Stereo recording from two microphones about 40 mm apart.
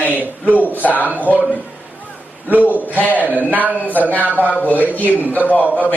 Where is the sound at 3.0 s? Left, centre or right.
Left.